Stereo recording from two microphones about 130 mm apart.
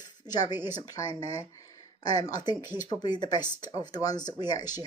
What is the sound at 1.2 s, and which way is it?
Speech, 50° right (ahead or behind).